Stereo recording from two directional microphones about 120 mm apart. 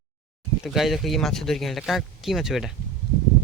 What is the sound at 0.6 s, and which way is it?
Speech, centre (ahead or behind).